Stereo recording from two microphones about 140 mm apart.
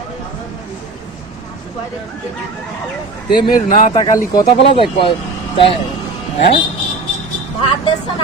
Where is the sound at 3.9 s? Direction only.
25° left (ahead or behind).